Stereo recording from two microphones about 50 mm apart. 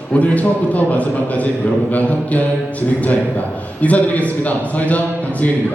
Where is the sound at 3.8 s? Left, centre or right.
Left.